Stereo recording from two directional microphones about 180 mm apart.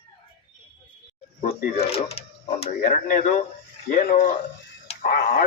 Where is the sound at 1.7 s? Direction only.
35° left (ahead or behind).